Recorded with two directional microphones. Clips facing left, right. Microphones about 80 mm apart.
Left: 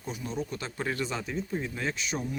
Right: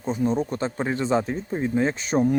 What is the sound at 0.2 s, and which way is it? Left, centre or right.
Speech, right.